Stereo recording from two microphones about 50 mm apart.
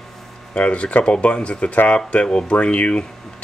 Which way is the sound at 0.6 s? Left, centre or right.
Left.